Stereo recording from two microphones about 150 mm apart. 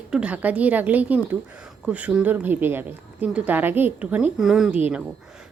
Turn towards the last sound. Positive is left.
turn(degrees=-5)  # may be behind; listen again after turning